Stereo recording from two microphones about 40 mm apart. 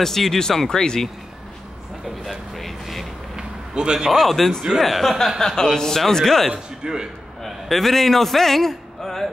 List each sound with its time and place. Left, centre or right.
0.0 s a man's voice: centre
2.2 s a sound: centre
3.3 s a sound: right
4.1 s a man's voice: centre
6.5 s a man's voice: centre
7.4 s a man's voice: centre